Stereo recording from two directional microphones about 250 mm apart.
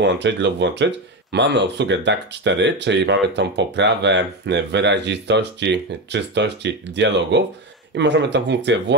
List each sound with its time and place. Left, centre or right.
0.0 s speech: right